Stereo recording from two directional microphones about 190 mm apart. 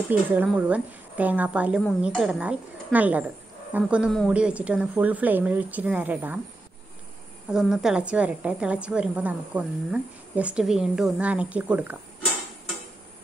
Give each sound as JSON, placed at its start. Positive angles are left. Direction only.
{"t": 0.3, "sound": "a woman's voice", "side_deg": -10}
{"t": 7.4, "sound": "a woman's voice", "side_deg": -5}